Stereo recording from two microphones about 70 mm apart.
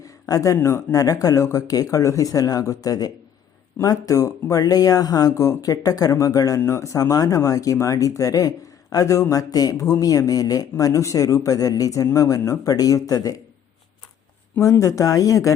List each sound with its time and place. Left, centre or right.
0.0 s speech: left
5.3 s speech: left
6.7 s speech: left
14.6 s speech: left